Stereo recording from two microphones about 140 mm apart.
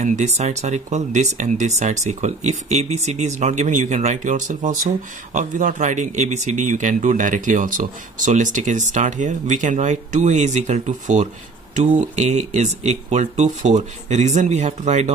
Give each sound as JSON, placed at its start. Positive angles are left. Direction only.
{"t": 0.0, "sound": "speech", "side_deg": -55}